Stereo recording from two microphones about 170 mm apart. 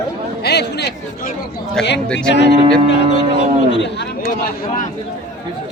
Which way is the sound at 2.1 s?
90° left.